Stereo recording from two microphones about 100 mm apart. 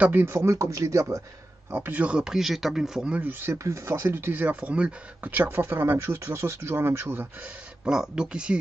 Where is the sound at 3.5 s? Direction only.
30° right (ahead or behind).